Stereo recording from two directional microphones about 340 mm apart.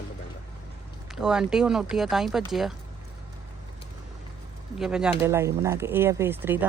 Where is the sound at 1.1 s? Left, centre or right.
Centre.